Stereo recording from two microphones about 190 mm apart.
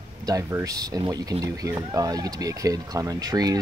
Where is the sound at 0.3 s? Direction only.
15° right (ahead or behind).